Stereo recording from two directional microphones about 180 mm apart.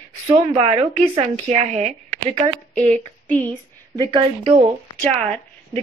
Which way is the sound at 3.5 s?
25° right (ahead or behind).